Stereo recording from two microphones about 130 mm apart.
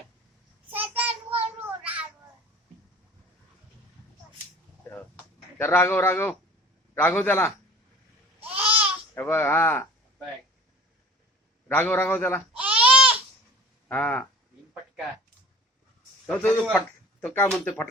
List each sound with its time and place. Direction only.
0.7 s child singing: 10° right (ahead or behind)
5.5 s a man's voice: 15° left (ahead or behind)
8.4 s babbling: 10° right (ahead or behind)
9.1 s a man's voice: 15° left (ahead or behind)
11.7 s a man's voice: 15° left (ahead or behind)
12.5 s babbling: 10° right (ahead or behind)
13.8 s speech: 15° left (ahead or behind)
16.2 s a man's voice: 10° left (ahead or behind)